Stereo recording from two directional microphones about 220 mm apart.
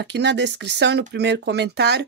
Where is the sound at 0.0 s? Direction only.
50° right (ahead or behind).